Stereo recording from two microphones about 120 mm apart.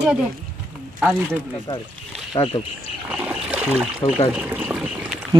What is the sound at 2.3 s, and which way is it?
Speech, 50° left (ahead or behind).